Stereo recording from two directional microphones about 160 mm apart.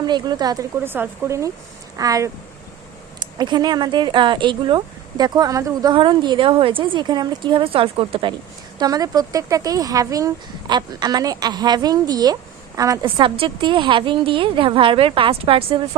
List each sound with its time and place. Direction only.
0.0 s speech: 25° right (ahead or behind)
0.9 s speech: 15° right (ahead or behind); by 8.3 s 35° right (ahead or behind)
8.8 s a woman's voice: 25° right (ahead or behind)